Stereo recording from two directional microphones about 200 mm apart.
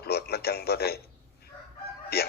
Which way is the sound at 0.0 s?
50° left (ahead or behind).